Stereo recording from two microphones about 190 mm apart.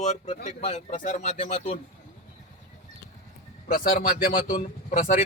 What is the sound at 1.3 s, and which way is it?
Speech, 30° left (ahead or behind).